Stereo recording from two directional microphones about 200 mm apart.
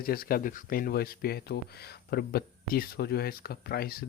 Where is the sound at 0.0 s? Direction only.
50° left (ahead or behind).